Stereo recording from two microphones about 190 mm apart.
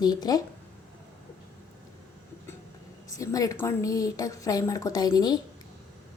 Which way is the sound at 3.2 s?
15° left (ahead or behind).